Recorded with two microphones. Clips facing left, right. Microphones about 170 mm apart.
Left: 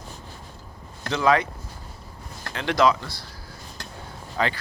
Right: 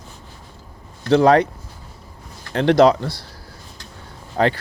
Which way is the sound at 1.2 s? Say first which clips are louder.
Right 5 dB; 35° right (ahead or behind).